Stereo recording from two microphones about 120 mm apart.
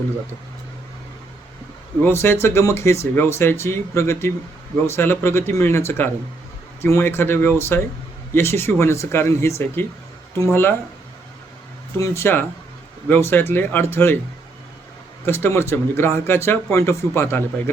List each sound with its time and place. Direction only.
2.0 s speech: 20° left (ahead or behind)
11.9 s speech: 25° left (ahead or behind)
15.3 s speech: 20° left (ahead or behind)